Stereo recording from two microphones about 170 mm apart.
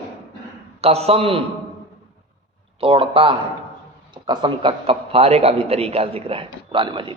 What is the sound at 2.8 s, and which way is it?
A man's voice, 35° right (ahead or behind).